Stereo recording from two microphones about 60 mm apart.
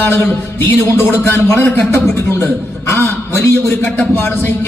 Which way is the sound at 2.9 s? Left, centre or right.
Left.